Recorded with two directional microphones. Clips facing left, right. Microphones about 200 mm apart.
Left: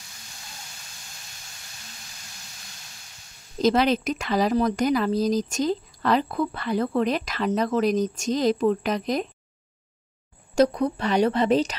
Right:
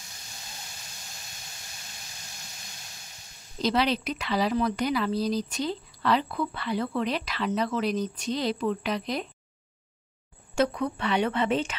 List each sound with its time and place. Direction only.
3.6 s speech: 45° left (ahead or behind)
10.5 s a woman's voice: 40° left (ahead or behind)